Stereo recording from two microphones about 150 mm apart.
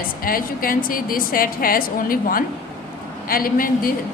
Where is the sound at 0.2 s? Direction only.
70° left (ahead or behind).